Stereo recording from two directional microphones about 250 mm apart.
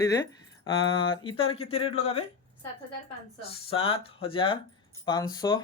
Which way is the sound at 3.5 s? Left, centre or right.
Left.